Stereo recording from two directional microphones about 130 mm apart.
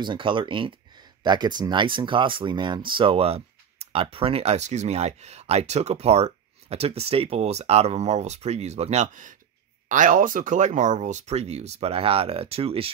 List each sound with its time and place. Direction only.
0.0 s speech: 40° right (ahead or behind)